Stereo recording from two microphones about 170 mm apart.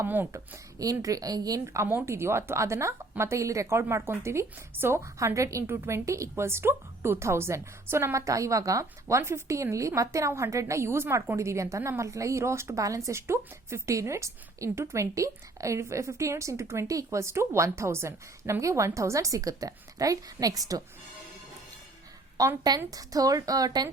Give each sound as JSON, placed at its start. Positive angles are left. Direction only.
{"t": 0.0, "sound": "a woman's voice", "side_deg": -15}
{"t": 22.4, "sound": "a woman's voice", "side_deg": -20}